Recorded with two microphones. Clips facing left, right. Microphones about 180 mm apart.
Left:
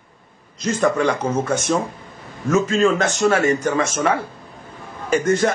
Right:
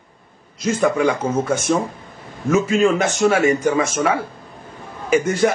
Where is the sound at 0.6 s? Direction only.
5° right (ahead or behind).